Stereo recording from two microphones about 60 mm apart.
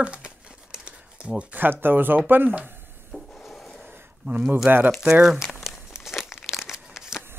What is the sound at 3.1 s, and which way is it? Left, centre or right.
Wood, centre.